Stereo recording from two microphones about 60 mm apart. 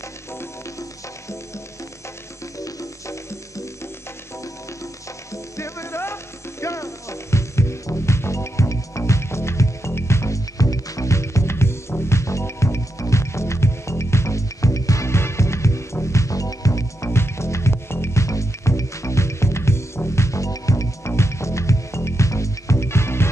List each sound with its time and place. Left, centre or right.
2.6 s music: left
5.3 s music: left
10.6 s music: left
20.2 s music: left
21.1 s music: left